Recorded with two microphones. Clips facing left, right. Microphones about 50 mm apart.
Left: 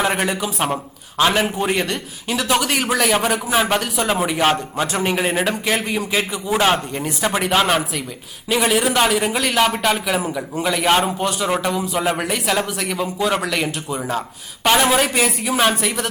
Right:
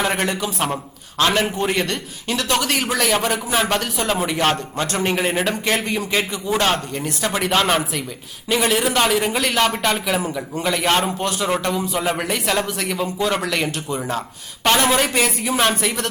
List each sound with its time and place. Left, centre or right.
0.0 s a man's voice: centre